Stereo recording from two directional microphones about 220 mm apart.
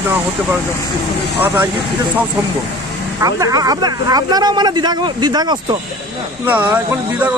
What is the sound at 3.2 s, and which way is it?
Speech, 15° right (ahead or behind).